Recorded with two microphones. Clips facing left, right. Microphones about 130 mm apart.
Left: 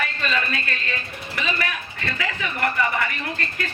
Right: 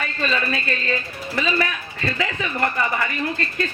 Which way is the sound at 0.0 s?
30° right (ahead or behind).